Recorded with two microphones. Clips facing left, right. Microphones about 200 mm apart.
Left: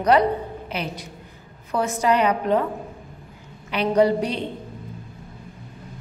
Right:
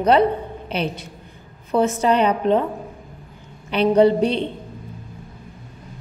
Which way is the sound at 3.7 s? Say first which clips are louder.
Right 4 dB; 30° right (ahead or behind).